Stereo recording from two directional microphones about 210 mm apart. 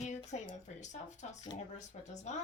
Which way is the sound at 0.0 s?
35° left (ahead or behind).